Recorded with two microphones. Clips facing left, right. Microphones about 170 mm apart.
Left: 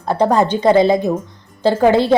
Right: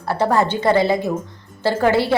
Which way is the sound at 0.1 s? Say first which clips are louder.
Left 3 dB; 15° left (ahead or behind).